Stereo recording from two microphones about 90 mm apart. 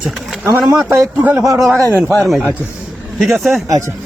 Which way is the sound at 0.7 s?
30° right (ahead or behind).